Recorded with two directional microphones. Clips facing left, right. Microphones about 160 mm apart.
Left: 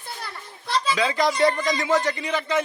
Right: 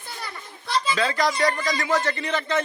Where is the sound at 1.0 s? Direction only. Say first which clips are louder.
Left 3 dB; 15° left (ahead or behind).